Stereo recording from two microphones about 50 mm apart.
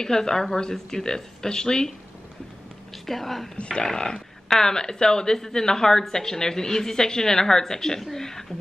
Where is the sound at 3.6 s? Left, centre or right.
Left.